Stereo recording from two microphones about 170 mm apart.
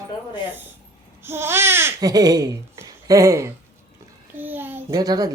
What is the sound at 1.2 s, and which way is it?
Speech, 15° right (ahead or behind).